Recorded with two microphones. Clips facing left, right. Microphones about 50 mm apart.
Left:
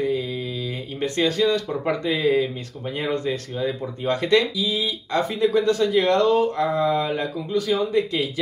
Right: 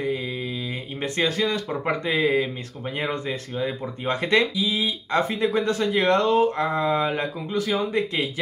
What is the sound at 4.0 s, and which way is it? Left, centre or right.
Speech, right.